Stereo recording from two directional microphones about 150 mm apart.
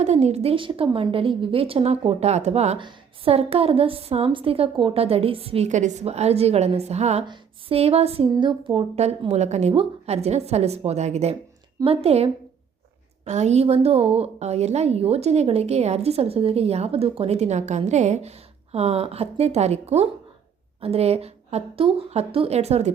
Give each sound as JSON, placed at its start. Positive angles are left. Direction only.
{"t": 0.0, "sound": "a woman's voice", "side_deg": -50}